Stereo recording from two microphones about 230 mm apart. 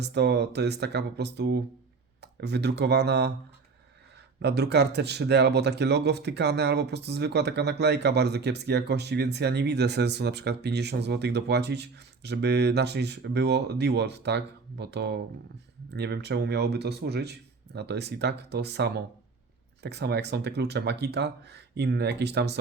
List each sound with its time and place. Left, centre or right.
0.0 s speech: right
4.4 s speech: right